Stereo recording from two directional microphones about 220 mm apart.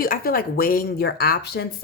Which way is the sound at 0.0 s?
40° left (ahead or behind).